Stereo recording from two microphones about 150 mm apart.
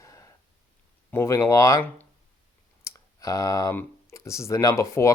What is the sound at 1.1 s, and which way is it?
Speech, 20° left (ahead or behind).